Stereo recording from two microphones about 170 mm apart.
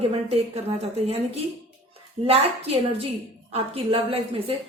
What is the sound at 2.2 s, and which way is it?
A woman's voice, 35° right (ahead or behind).